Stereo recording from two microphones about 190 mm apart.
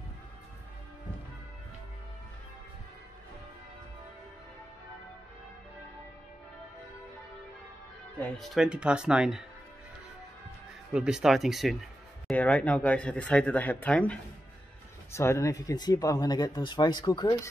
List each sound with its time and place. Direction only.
8.2 s speech: centre (ahead or behind)
10.9 s speech: 5° right (ahead or behind)
15.1 s speech: 15° left (ahead or behind)